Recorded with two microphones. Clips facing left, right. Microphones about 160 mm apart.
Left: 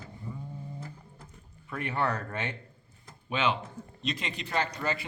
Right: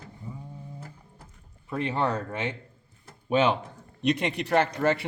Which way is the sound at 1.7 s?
25° right (ahead or behind).